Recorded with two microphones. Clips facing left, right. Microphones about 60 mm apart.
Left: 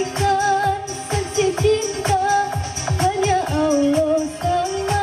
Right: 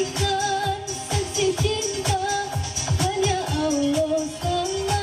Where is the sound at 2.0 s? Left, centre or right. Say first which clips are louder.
Left 6 dB; left.